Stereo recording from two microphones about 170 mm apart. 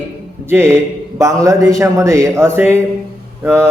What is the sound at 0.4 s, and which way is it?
Speech, 15° right (ahead or behind).